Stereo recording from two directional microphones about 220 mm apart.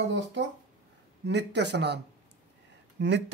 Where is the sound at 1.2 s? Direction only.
50° right (ahead or behind).